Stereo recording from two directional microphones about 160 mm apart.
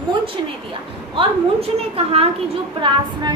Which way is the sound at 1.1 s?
35° right (ahead or behind).